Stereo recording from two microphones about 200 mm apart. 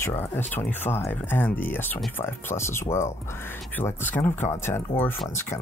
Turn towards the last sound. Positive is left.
turn(degrees=10)  # may be behind; listen again after turning